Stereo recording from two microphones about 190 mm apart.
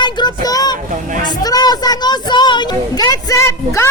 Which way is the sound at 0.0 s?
25° left (ahead or behind).